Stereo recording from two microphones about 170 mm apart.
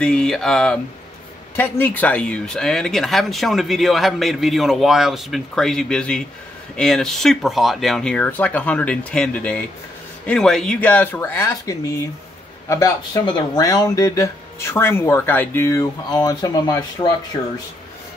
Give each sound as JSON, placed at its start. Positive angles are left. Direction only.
{"t": 0.0, "sound": "speech", "side_deg": 5}